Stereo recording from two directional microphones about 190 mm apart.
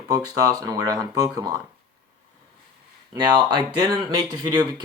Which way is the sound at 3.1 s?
25° right (ahead or behind).